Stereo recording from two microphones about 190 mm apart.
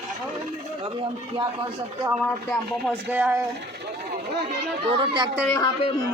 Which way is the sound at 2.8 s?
10° right (ahead or behind).